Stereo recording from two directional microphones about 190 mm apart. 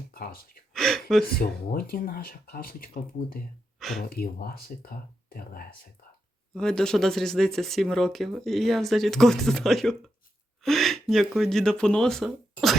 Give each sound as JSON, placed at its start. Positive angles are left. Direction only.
{"t": 0.1, "sound": "speech", "side_deg": 50}
{"t": 0.7, "sound": "gasp", "side_deg": 0}
{"t": 1.4, "sound": "speech", "side_deg": 50}
{"t": 3.8, "sound": "a sound", "side_deg": 0}
{"t": 4.1, "sound": "speech", "side_deg": 50}
{"t": 6.5, "sound": "speech", "side_deg": 5}